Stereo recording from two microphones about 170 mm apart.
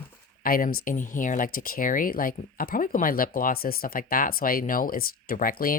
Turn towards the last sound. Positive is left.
turn(degrees=55)  # may be behind; listen again after turning